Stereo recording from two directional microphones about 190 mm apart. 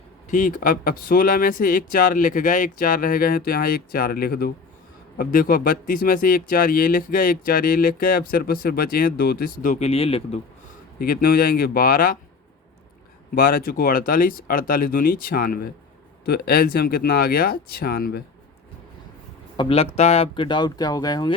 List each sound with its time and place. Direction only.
0.3 s speech: 45° left (ahead or behind)
11.0 s speech: 50° left (ahead or behind)
13.3 s speech: 50° left (ahead or behind)
19.5 s speech: 30° left (ahead or behind)